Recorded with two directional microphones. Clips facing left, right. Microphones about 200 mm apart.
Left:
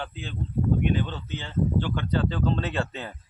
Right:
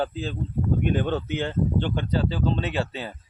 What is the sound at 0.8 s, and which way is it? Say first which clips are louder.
Speech: right 3 dB; 50° right (ahead or behind).